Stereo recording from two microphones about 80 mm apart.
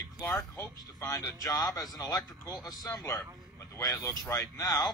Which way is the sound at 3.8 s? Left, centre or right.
Left.